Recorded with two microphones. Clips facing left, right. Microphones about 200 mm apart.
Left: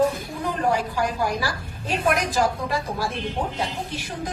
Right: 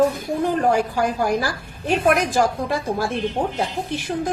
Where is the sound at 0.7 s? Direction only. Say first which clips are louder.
Right 4 dB; 55° right (ahead or behind).